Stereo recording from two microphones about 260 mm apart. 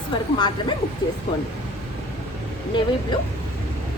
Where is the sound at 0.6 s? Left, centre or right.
Centre.